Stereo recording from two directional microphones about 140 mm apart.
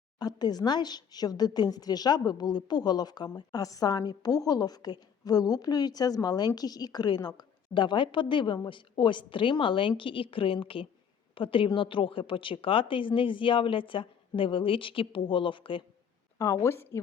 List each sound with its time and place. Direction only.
0.2 s a woman's voice: 30° left (ahead or behind)
16.4 s a woman's voice: 20° left (ahead or behind)